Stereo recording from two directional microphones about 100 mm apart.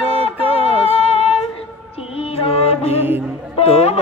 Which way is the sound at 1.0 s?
80° left.